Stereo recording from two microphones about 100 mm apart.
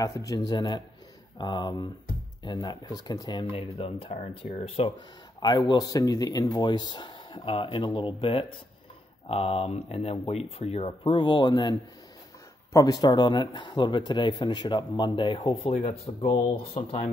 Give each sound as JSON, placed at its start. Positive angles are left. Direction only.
{"t": 0.0, "sound": "speech", "side_deg": 35}
{"t": 3.7, "sound": "speech", "side_deg": 75}
{"t": 4.9, "sound": "speech", "side_deg": 50}
{"t": 9.3, "sound": "speech", "side_deg": 80}
{"t": 12.7, "sound": "speech", "side_deg": 40}